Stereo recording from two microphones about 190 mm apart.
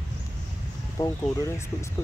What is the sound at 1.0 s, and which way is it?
Speech, 15° left (ahead or behind).